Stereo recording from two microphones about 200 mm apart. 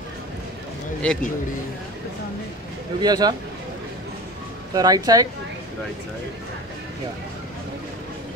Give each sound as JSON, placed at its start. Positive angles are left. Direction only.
{"t": 1.0, "sound": "a man's voice", "side_deg": 5}
{"t": 3.0, "sound": "speech", "side_deg": -20}
{"t": 4.7, "sound": "speech", "side_deg": -20}